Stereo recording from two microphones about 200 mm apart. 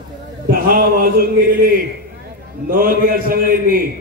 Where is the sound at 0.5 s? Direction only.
45° right (ahead or behind).